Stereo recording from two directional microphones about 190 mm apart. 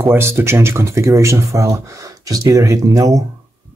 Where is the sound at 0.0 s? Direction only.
15° right (ahead or behind).